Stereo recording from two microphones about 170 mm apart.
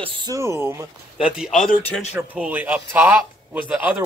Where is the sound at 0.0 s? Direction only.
30° right (ahead or behind).